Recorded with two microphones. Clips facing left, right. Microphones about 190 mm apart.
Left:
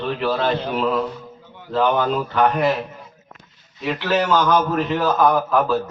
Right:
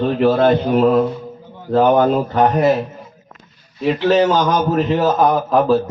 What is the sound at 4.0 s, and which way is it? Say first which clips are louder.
Speech: right 4 dB; 35° right (ahead or behind).